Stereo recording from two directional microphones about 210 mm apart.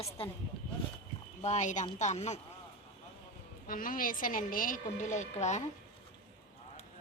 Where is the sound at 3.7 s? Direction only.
40° left (ahead or behind).